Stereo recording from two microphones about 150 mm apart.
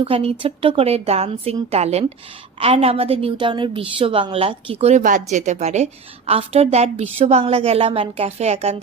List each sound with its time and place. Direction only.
0.0 s a woman's voice: 40° right (ahead or behind)